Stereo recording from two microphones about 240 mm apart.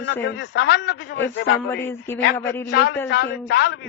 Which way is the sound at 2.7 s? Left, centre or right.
Left.